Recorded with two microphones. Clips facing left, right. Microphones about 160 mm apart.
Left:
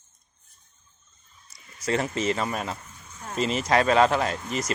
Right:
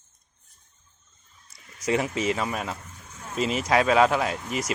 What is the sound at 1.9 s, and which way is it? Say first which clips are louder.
Speech: right 1 dB; 10° right (ahead or behind).